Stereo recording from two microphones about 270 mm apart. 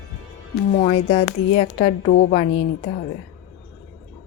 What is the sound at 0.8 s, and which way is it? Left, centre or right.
A woman's voice, left.